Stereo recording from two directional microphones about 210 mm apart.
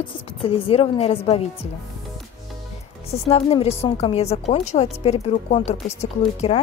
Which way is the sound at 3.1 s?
30° left (ahead or behind).